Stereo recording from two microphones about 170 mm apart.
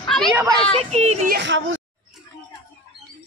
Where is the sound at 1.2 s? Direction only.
75° right (ahead or behind).